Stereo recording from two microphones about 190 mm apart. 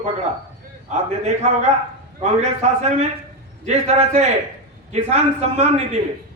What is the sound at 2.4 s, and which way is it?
A man's voice, 35° right (ahead or behind).